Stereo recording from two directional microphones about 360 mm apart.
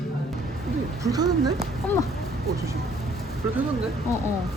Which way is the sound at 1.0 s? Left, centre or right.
Centre.